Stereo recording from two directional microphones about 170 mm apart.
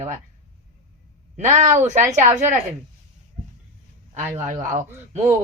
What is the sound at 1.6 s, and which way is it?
Speech, 45° right (ahead or behind).